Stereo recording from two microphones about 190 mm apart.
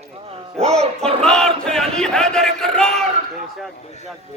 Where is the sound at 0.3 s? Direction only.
30° right (ahead or behind).